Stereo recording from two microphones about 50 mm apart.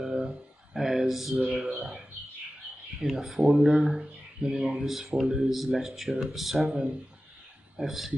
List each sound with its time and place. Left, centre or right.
0.0 s a sound: centre
1.4 s speech: centre
3.0 s speech: centre